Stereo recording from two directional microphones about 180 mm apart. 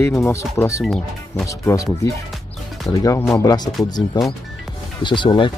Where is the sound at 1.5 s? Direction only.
15° left (ahead or behind).